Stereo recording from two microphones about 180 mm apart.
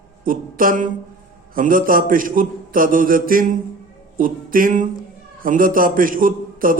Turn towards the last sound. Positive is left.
turn(degrees=-50)  # may be behind; listen again after turning